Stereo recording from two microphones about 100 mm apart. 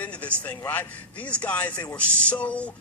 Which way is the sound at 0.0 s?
15° left (ahead or behind).